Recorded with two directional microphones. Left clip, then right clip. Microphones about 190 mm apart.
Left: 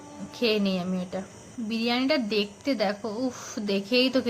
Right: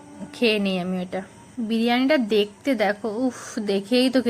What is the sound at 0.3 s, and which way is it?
A woman's voice, 25° right (ahead or behind).